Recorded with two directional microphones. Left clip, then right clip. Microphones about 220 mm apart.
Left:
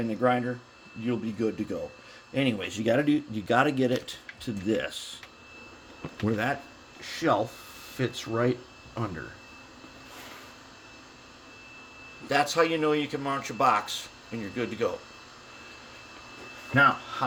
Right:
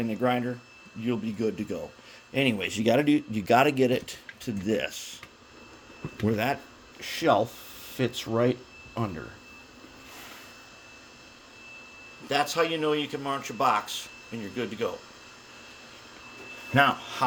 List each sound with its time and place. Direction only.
0.0 s a man's voice: 20° right (ahead or behind)
6.2 s speech: 20° right (ahead or behind)
7.0 s speech: 35° right (ahead or behind)
12.3 s speech: 5° right (ahead or behind)
16.7 s speech: 40° right (ahead or behind)